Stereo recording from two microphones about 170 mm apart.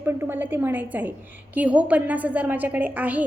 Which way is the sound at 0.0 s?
15° right (ahead or behind).